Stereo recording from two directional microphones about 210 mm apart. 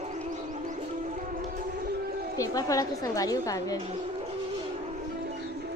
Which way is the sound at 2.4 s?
15° left (ahead or behind).